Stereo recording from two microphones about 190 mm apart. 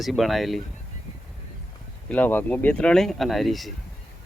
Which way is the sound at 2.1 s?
10° left (ahead or behind).